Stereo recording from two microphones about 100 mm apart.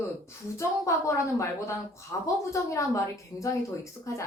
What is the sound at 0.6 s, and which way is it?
Speech, 30° left (ahead or behind).